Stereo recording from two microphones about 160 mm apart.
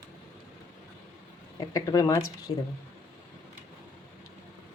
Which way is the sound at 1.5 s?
20° left (ahead or behind).